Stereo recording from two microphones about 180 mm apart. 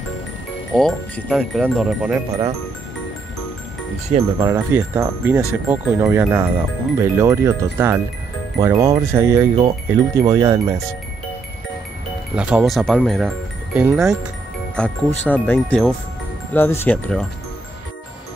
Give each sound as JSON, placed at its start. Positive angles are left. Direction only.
{"t": 0.7, "sound": "speech", "side_deg": 0}
{"t": 4.4, "sound": "speech", "side_deg": -15}
{"t": 12.4, "sound": "speech", "side_deg": -5}
{"t": 14.8, "sound": "speech", "side_deg": 10}